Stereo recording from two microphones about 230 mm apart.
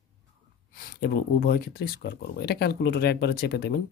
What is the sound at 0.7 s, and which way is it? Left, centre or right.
Speech, left.